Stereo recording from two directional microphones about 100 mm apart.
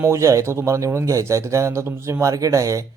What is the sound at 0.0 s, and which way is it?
Speech, 30° right (ahead or behind).